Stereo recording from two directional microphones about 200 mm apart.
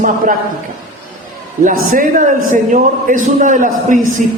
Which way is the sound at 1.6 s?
40° right (ahead or behind).